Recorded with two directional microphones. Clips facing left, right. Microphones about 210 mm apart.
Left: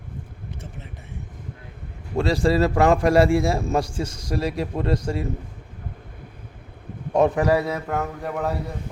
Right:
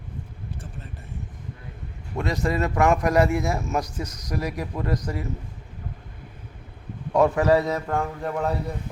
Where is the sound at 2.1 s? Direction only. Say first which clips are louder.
Left 5 dB; 30° left (ahead or behind).